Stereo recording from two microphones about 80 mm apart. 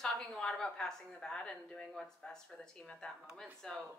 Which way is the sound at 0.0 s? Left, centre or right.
Centre.